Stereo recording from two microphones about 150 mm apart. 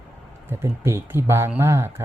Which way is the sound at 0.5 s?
15° right (ahead or behind).